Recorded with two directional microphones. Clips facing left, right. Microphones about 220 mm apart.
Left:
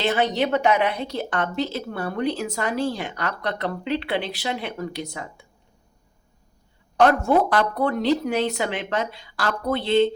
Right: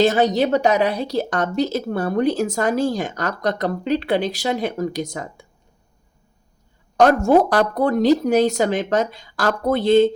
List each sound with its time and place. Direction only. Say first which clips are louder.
0.0 s a woman's voice: right 6 dB; 40° right (ahead or behind)
6.9 s a woman's voice: right 4 dB; 45° right (ahead or behind)